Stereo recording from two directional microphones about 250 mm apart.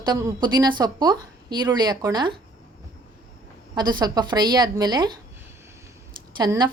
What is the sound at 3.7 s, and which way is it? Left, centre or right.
A woman's voice, centre.